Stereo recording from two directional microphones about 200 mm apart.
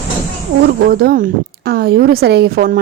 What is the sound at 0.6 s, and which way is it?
A woman's voice, 50° right (ahead or behind).